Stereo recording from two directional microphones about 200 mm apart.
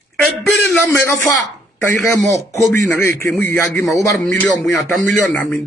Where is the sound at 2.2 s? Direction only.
15° left (ahead or behind).